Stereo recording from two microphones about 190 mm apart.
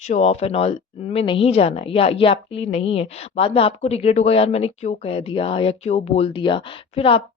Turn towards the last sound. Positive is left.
turn(degrees=30)  # may be behind; listen again after turning